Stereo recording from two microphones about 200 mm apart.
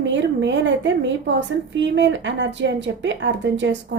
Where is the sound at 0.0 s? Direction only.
65° right (ahead or behind).